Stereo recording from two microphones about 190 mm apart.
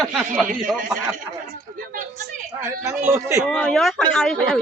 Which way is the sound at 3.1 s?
15° right (ahead or behind).